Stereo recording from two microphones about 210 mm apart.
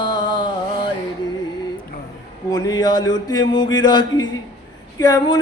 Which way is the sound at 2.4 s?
15° left (ahead or behind).